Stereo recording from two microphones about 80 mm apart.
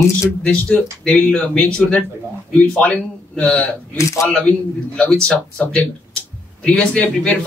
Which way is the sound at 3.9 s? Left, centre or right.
Left.